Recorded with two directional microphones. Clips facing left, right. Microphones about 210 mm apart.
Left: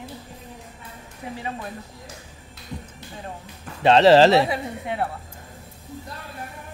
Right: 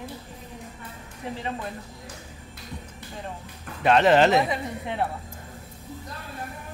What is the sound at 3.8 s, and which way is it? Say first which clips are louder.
Speech: left 4 dB; 30° left (ahead or behind).